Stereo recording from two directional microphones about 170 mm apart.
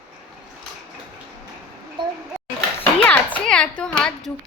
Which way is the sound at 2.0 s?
30° right (ahead or behind).